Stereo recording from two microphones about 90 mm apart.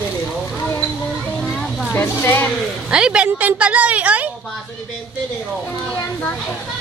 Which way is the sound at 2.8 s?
10° right (ahead or behind).